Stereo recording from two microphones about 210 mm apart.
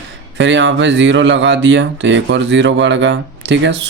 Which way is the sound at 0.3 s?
60° right (ahead or behind).